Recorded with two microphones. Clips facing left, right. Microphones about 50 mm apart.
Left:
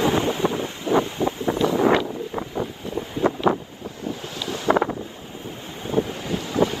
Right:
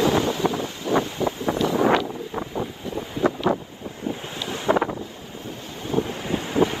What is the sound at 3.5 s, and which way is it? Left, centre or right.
Wind noise, left.